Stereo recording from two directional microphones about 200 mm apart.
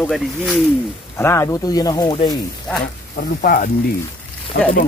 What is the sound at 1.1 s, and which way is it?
Speech, 15° left (ahead or behind).